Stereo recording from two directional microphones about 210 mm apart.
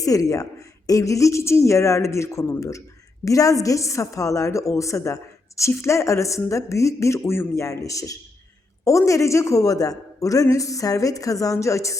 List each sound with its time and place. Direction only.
0.0 s a woman's voice: 15° left (ahead or behind)